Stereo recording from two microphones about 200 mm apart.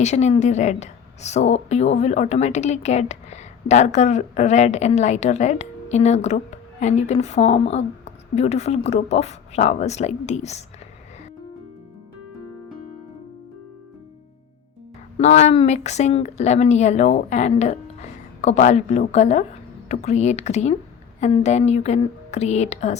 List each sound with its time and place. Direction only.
0.0 s a woman's voice: 35° left (ahead or behind)
15.2 s a woman's voice: 35° left (ahead or behind)